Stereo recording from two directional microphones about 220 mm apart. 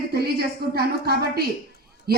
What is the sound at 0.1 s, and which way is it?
A woman's voice, 45° right (ahead or behind).